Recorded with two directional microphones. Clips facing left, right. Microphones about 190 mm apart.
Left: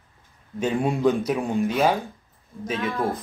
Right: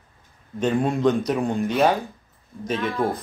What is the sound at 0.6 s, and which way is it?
A man's voice, 10° left (ahead or behind).